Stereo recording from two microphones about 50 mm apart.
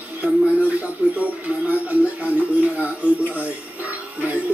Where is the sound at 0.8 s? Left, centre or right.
Right.